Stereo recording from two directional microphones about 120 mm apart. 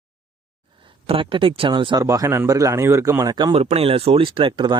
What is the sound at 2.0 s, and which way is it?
A man's voice, 25° right (ahead or behind).